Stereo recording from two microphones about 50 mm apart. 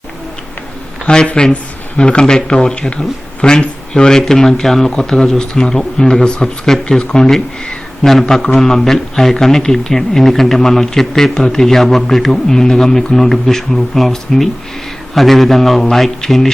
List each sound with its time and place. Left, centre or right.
1.0 s a man's voice: centre